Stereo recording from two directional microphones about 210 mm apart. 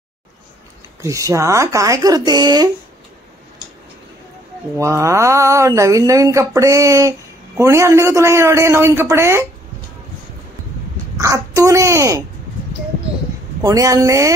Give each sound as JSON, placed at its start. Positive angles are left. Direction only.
{"t": 1.0, "sound": "speech", "side_deg": -15}
{"t": 4.7, "sound": "speech", "side_deg": -15}
{"t": 11.1, "sound": "a child's voice", "side_deg": -15}
{"t": 13.6, "sound": "speech", "side_deg": -15}